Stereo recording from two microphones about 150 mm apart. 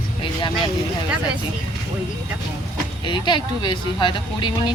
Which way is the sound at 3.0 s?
30° left (ahead or behind).